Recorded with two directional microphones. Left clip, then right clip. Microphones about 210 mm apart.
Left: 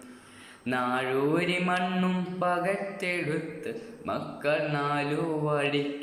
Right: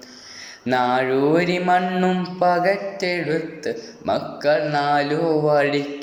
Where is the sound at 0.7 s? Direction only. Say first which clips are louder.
Right 9 dB; 10° left (ahead or behind).